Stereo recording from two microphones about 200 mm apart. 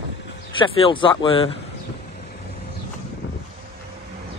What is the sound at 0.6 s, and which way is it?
Speech, 25° left (ahead or behind).